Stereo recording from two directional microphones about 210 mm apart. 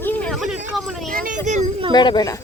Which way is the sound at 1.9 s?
20° left (ahead or behind).